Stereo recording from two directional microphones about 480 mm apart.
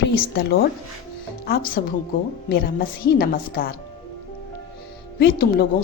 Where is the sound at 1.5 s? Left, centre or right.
Centre.